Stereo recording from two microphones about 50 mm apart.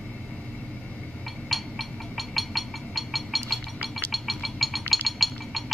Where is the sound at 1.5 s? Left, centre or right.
Centre.